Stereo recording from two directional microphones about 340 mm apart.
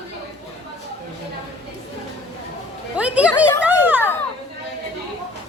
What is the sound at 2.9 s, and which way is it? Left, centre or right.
Speech, centre.